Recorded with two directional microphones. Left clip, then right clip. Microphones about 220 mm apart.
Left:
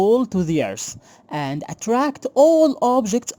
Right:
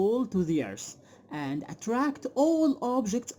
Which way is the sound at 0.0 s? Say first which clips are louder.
Left 10 dB; 40° left (ahead or behind).